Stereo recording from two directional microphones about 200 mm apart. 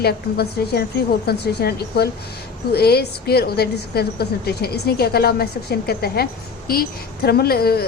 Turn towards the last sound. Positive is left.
turn(degrees=50)  # may be behind; listen again after turning